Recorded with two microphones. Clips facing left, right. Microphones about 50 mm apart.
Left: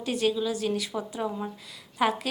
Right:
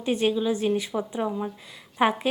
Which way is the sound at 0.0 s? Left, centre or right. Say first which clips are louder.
Right 3 dB; right.